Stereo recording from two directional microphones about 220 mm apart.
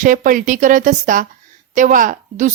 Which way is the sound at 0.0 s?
35° right (ahead or behind).